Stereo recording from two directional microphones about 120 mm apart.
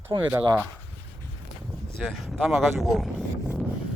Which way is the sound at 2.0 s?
Centre (ahead or behind).